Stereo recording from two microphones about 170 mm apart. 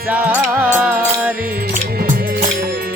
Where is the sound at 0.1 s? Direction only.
10° right (ahead or behind).